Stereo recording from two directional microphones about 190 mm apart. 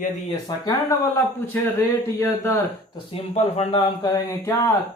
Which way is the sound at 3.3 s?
30° left (ahead or behind).